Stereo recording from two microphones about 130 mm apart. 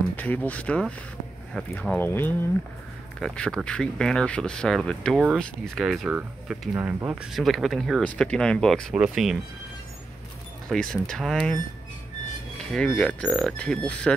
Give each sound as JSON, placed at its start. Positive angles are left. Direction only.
{"t": 0.1, "sound": "speech", "side_deg": 15}
{"t": 3.2, "sound": "speech", "side_deg": 5}
{"t": 8.9, "sound": "speech", "side_deg": -5}
{"t": 10.7, "sound": "speech", "side_deg": 5}
{"t": 12.7, "sound": "speech", "side_deg": 10}